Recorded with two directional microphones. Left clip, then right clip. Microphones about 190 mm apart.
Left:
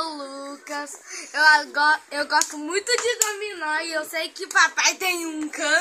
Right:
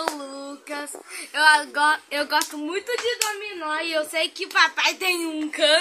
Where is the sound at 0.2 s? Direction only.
5° right (ahead or behind).